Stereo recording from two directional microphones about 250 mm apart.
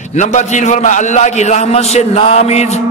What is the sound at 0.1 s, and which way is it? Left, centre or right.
A man's voice, left.